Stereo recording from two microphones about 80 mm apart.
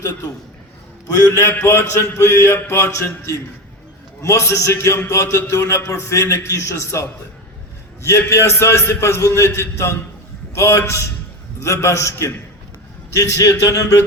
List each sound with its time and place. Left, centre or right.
1.0 s a man's voice: left
8.0 s a man's voice: left